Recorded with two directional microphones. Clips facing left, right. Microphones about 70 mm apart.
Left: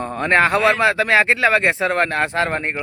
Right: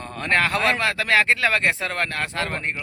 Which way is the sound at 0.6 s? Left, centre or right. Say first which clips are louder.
Left 6 dB; centre.